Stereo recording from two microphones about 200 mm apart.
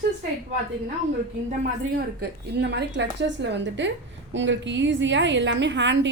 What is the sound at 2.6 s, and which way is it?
A woman's voice, 60° right (ahead or behind).